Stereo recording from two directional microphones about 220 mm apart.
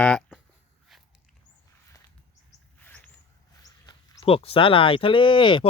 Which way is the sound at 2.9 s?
5° left (ahead or behind).